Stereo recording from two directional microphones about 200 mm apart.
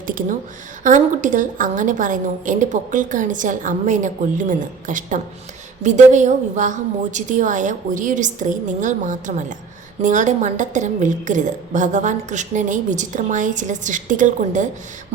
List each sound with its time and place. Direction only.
0.1 s a woman's voice: 40° right (ahead or behind)